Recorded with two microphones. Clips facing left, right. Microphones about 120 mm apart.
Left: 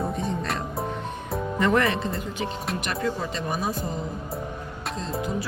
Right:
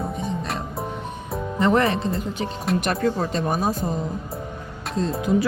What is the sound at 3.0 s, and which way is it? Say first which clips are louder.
Speech: right 5 dB; 45° right (ahead or behind).